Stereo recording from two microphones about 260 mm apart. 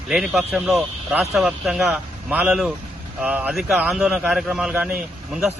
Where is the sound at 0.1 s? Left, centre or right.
Centre.